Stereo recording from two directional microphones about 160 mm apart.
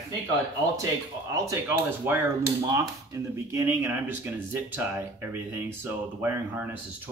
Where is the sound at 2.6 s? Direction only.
20° right (ahead or behind).